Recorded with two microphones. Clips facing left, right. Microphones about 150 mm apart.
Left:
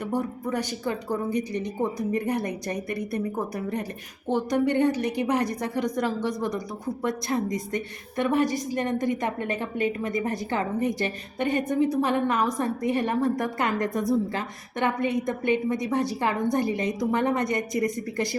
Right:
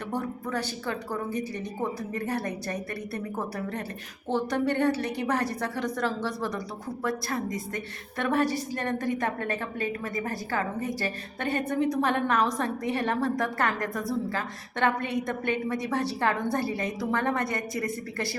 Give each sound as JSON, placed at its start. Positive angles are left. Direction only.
{"t": 0.0, "sound": "a woman's voice", "side_deg": 10}